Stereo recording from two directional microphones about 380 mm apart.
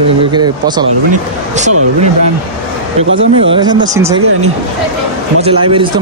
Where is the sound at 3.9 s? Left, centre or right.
Centre.